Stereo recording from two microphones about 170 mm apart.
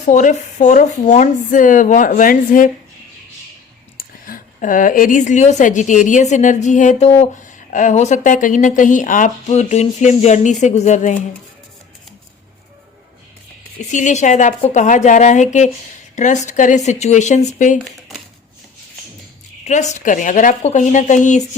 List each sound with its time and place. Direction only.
0.0 s speech: 45° left (ahead or behind)
3.9 s a woman's voice: 55° left (ahead or behind)
13.9 s speech: 45° left (ahead or behind)
19.6 s speech: 45° left (ahead or behind)